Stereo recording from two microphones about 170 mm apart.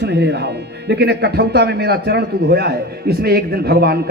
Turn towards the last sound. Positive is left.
turn(degrees=-65)  # may be behind; listen again after turning